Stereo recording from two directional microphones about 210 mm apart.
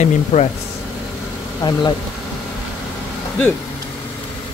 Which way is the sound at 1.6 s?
20° left (ahead or behind).